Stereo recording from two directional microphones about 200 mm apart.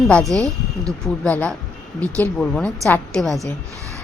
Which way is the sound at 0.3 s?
15° right (ahead or behind).